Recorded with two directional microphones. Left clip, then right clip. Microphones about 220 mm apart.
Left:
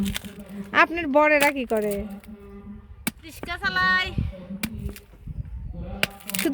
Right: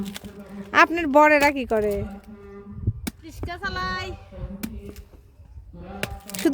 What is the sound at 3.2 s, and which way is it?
Child singing, centre (ahead or behind).